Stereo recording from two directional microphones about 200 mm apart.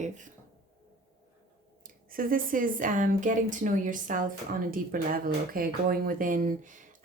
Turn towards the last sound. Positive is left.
turn(degrees=-40)  # may be behind; listen again after turning